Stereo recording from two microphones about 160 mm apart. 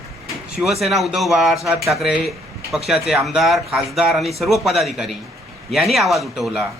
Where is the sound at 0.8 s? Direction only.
Centre (ahead or behind).